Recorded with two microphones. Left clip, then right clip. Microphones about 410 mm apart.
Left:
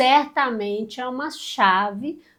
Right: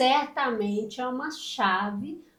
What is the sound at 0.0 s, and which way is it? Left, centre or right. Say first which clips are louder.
A woman's voice: left 6 dB; left.